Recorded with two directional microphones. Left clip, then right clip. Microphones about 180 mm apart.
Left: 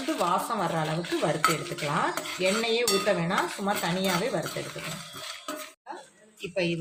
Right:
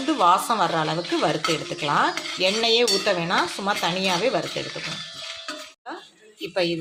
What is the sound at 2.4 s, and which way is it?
Cutlery, 40° right (ahead or behind).